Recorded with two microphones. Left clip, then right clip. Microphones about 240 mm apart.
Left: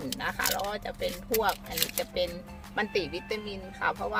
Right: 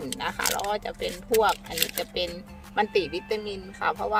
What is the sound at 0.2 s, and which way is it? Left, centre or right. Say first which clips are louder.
Speech: right 2 dB; centre.